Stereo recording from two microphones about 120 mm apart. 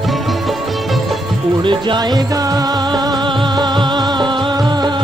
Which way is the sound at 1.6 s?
45° right (ahead or behind).